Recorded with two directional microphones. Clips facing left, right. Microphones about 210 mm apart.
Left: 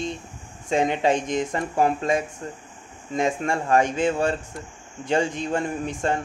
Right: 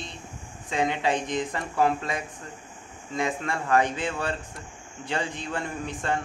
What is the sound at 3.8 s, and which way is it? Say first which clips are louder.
Speech: left 7 dB; 45° left (ahead or behind).